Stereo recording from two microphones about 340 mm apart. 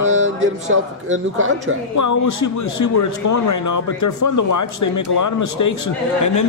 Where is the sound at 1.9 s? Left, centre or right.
Left.